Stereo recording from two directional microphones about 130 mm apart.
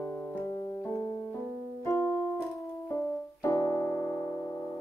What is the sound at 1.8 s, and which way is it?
Keyboard, 20° left (ahead or behind).